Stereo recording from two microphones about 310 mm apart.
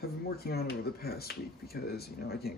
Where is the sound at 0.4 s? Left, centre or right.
Left.